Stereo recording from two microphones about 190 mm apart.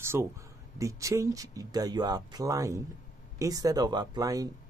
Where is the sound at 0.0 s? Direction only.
15° right (ahead or behind).